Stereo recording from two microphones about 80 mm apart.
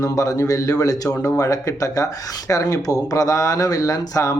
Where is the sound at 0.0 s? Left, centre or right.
Left.